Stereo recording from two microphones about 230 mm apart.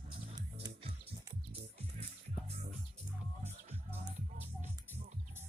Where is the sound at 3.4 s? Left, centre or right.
Right.